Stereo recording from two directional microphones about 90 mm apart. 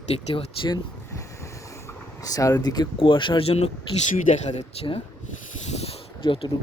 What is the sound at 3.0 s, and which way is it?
Speech, 65° left (ahead or behind).